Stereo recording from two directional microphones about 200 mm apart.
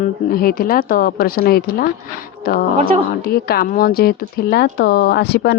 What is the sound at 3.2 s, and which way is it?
Speech, 50° left (ahead or behind).